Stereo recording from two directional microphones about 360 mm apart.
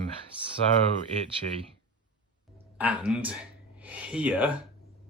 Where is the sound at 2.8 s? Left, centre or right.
Centre.